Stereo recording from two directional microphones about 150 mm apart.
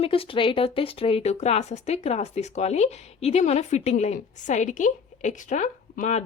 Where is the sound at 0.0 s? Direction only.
40° left (ahead or behind).